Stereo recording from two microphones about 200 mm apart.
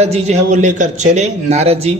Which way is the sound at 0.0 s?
35° right (ahead or behind).